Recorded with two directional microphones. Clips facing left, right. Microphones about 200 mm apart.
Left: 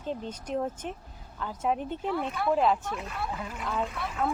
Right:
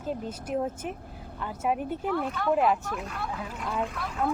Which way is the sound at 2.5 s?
5° right (ahead or behind).